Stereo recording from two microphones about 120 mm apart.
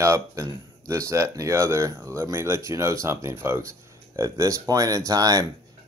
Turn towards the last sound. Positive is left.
turn(degrees=-30)  # may be behind; listen again after turning